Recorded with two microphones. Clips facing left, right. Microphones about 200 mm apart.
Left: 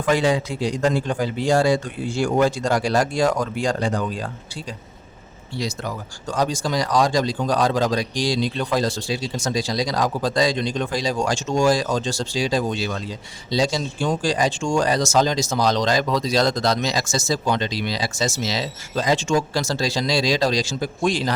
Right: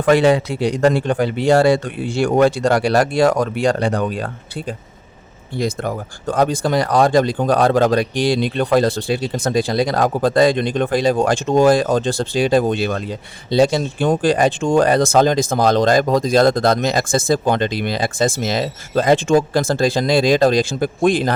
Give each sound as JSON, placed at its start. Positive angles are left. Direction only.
{"t": 0.0, "sound": "speech", "side_deg": -65}